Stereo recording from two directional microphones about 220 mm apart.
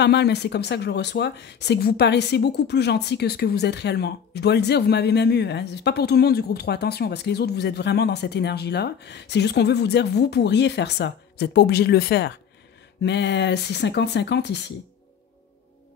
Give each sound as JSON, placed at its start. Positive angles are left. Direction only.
{"t": 0.0, "sound": "speech", "side_deg": 50}